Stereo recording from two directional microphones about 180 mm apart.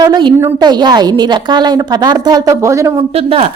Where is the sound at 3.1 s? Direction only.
35° right (ahead or behind).